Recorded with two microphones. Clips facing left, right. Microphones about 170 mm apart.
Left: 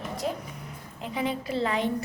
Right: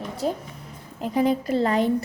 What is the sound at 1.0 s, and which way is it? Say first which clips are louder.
Speech: right 8 dB; 40° right (ahead or behind).